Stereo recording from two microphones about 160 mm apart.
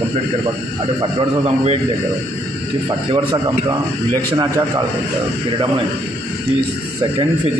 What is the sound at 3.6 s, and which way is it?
Speech, 25° right (ahead or behind).